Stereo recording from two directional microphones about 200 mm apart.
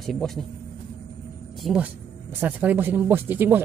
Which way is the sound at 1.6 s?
5° right (ahead or behind).